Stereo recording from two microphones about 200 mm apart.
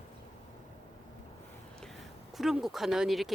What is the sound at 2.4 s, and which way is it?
Speech, centre (ahead or behind).